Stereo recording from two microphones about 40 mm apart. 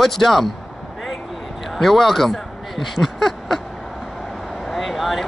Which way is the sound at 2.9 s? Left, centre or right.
Centre.